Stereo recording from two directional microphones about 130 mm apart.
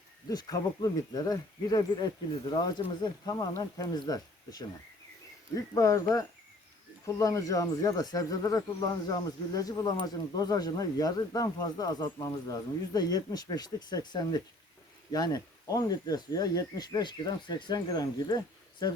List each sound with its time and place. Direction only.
0.3 s speech: 30° left (ahead or behind)